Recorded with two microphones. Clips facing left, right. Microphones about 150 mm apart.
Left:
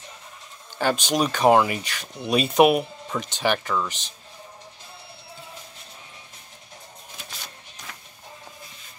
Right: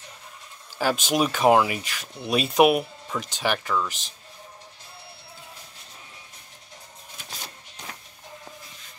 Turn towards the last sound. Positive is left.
turn(degrees=-30)  # may be behind; listen again after turning